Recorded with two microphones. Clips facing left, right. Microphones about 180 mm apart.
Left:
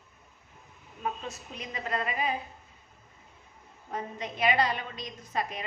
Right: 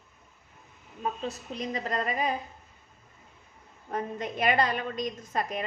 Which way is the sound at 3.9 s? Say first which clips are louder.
Right 4 dB; 50° right (ahead or behind).